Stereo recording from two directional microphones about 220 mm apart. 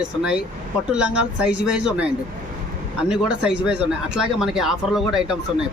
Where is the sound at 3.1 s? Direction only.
5° right (ahead or behind).